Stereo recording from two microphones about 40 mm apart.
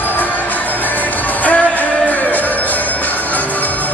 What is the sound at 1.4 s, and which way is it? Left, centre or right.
Music, left.